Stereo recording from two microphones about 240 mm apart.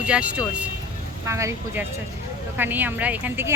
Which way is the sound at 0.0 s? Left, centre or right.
Centre.